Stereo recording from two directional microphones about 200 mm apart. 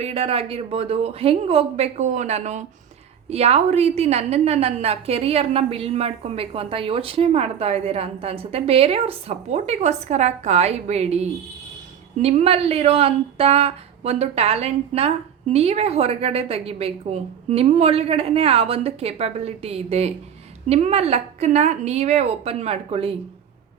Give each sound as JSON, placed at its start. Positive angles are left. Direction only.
{"t": 0.0, "sound": "a woman's voice", "side_deg": -30}